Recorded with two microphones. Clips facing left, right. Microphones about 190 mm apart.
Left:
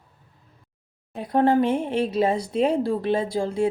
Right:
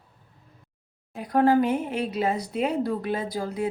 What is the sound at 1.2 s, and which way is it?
Speech, 25° left (ahead or behind).